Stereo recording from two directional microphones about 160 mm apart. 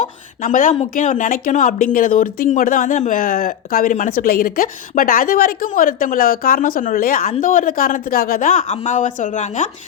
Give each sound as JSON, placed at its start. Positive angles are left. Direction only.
{"t": 0.0, "sound": "speech", "side_deg": 55}